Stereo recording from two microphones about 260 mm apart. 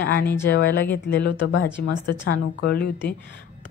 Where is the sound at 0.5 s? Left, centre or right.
Left.